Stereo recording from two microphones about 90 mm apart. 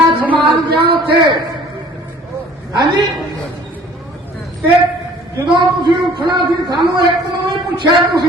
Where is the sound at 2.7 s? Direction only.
55° right (ahead or behind).